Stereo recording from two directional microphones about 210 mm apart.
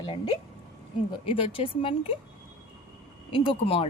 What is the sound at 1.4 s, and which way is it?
Speech, 25° left (ahead or behind).